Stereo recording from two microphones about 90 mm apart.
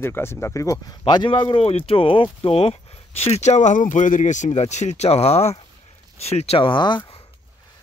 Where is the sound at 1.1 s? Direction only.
60° left (ahead or behind); by 2.7 s 90° left.